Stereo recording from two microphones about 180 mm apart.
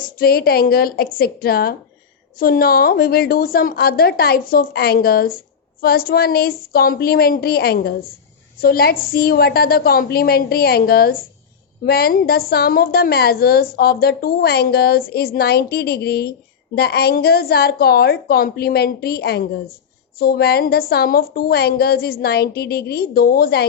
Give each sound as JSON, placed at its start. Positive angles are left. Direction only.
{"t": 0.2, "sound": "a woman's voice", "side_deg": 55}